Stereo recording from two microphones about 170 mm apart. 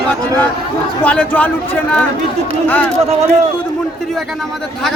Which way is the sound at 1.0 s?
10° left (ahead or behind).